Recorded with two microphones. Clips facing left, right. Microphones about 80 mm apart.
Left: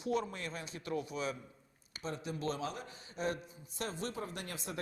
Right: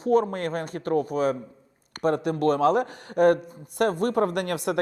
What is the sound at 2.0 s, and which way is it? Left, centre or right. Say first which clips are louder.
Speech: right 16 dB; right.